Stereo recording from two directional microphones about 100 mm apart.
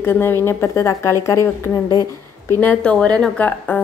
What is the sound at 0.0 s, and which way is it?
Speech, 25° left (ahead or behind).